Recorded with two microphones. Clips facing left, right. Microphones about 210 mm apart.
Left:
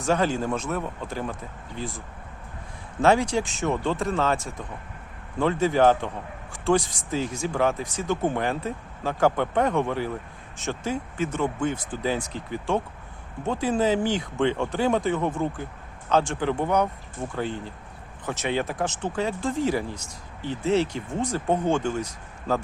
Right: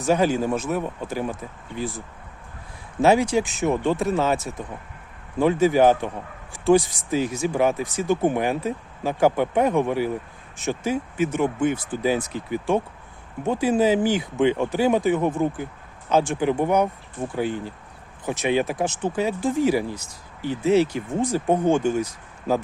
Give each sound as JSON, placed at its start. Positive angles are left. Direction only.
{"t": 0.0, "sound": "speech", "side_deg": -10}
{"t": 0.8, "sound": "speech", "side_deg": -15}
{"t": 3.0, "sound": "speech", "side_deg": -10}